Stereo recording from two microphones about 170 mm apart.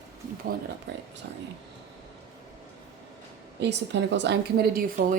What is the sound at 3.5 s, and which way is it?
A woman's voice, 90° right.